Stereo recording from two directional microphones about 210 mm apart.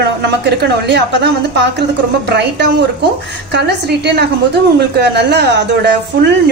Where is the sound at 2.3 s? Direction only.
55° right (ahead or behind).